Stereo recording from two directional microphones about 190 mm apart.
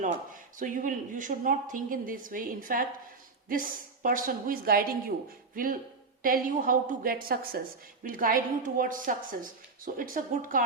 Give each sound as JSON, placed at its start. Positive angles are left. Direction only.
{"t": 0.5, "sound": "a woman's voice", "side_deg": -45}